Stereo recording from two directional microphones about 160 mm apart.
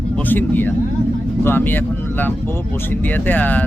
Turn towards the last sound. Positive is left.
turn(degrees=10)  # may be behind; listen again after turning